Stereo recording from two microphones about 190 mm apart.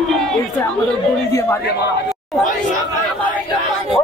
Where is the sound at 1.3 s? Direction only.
15° left (ahead or behind).